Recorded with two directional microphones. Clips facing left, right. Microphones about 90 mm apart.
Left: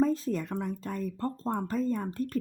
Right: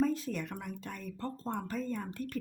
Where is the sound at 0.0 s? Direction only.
35° left (ahead or behind).